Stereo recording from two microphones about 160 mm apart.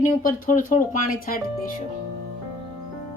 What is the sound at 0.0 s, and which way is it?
Speech, 60° left (ahead or behind).